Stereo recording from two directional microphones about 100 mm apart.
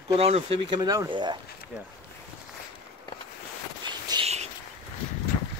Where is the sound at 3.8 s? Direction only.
45° right (ahead or behind).